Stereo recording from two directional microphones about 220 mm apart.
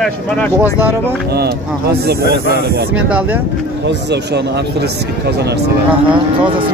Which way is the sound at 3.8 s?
50° right (ahead or behind).